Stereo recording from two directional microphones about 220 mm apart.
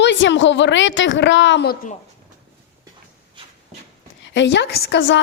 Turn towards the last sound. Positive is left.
turn(degrees=55)  # may be behind; listen again after turning